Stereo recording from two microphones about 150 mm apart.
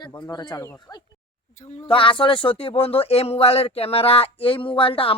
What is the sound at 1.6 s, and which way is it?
Speech, 50° left (ahead or behind).